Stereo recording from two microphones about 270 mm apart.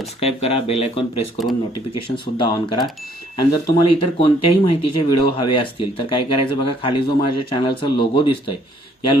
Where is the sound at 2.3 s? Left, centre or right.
Centre.